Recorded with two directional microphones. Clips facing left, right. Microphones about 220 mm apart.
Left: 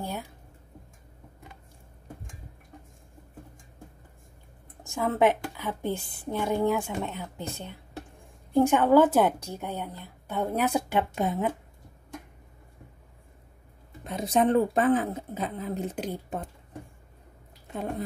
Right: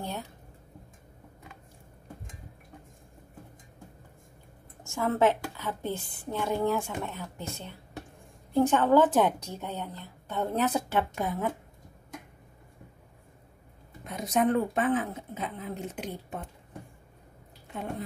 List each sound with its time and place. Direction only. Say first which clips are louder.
4.8 s a woman's voice: left 1 dB; 15° left (ahead or behind)
14.0 s speech: left 2 dB; 30° left (ahead or behind)